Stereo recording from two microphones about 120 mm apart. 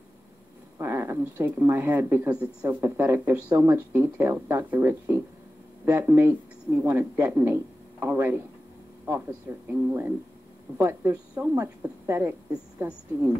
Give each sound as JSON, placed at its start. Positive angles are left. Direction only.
{"t": 0.7, "sound": "speech", "side_deg": -20}
{"t": 9.7, "sound": "speech", "side_deg": -20}
{"t": 12.4, "sound": "speech", "side_deg": -10}